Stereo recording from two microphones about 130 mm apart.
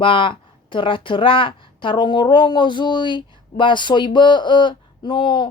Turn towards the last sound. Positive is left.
turn(degrees=40)  # may be behind; listen again after turning